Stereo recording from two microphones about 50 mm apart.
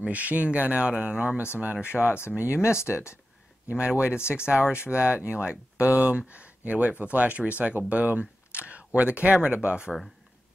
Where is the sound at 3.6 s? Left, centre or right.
Right.